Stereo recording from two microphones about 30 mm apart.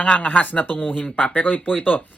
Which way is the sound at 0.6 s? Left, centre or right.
Left.